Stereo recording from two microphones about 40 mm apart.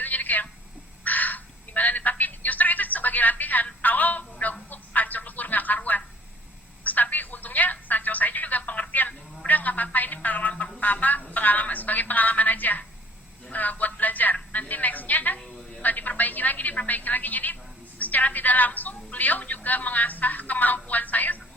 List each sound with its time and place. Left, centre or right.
0.0 s telephone: left
1.0 s music: left
4.7 s a sound: left
6.8 s telephone: left
9.5 s music: left
10.8 s a sound: left
14.5 s music: left
15.8 s a sound: left
18.0 s music: left